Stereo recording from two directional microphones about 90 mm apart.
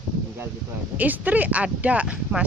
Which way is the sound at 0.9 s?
20° right (ahead or behind).